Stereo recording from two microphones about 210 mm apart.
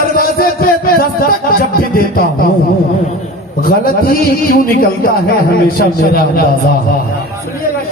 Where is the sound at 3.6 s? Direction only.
45° left (ahead or behind).